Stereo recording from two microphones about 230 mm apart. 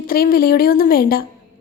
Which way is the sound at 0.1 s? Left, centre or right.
Left.